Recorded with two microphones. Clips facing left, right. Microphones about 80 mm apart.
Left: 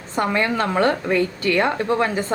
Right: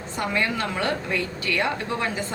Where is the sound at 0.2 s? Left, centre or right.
Left.